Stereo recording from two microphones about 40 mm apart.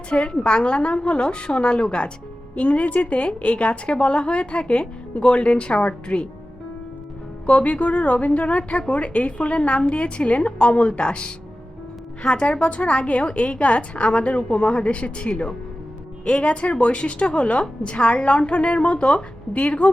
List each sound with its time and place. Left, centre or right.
0.1 s a woman's voice: left
7.4 s a woman's voice: left